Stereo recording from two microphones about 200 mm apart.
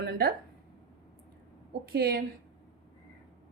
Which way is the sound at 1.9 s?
50° right (ahead or behind).